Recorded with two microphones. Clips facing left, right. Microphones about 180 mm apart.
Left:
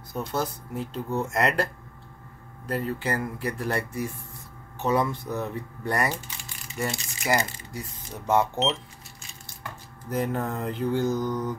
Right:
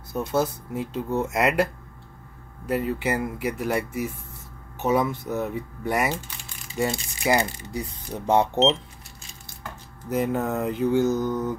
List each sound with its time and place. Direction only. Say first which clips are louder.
0.1 s speech: right 5 dB; 5° right (ahead or behind)
4.9 s speech: right 2 dB; 20° right (ahead or behind)
10.0 s speech: right 3 dB; 10° right (ahead or behind)